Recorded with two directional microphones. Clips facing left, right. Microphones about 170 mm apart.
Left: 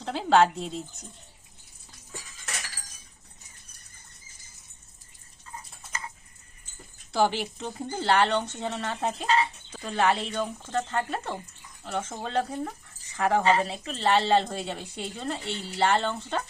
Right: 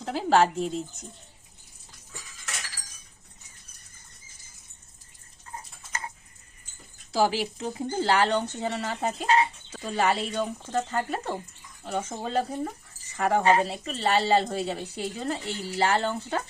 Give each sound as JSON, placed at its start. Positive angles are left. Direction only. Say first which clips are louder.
{"t": 0.0, "sound": "speech", "louder": "left 1 dB", "side_deg": -5}
{"t": 7.1, "sound": "speech", "louder": "right 1 dB", "side_deg": -5}